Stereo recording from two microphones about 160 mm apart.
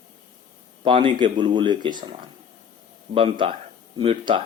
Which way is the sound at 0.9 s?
30° right (ahead or behind).